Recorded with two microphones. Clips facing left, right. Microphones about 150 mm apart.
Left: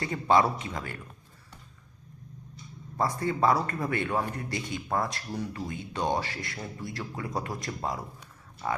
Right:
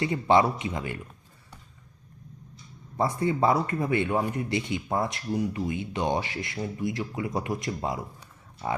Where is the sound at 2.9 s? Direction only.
20° right (ahead or behind).